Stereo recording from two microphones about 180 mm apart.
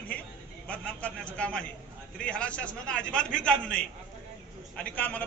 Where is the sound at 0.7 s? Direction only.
5° left (ahead or behind).